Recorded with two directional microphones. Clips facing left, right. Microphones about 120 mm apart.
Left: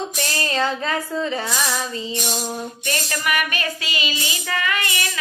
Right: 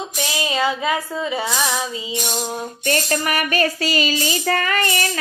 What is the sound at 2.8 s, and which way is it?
Child singing, 40° right (ahead or behind).